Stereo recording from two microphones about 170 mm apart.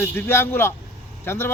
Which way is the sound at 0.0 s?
15° left (ahead or behind).